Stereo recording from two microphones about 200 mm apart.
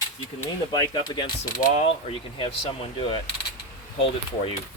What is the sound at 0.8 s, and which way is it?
Speech, 20° left (ahead or behind).